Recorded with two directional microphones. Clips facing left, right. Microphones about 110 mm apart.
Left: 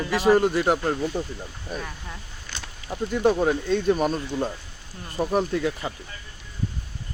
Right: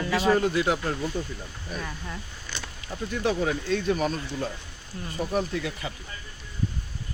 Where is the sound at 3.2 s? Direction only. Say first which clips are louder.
Left 5 dB; 45° left (ahead or behind).